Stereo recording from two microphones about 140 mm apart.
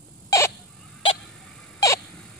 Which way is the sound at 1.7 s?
25° left (ahead or behind).